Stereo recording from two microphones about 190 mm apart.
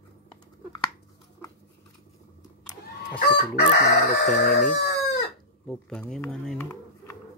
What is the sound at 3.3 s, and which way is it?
Crowing, 55° left (ahead or behind).